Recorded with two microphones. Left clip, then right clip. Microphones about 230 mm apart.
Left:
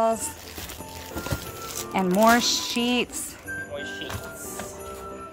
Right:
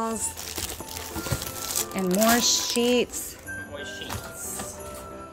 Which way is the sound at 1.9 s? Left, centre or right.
Centre.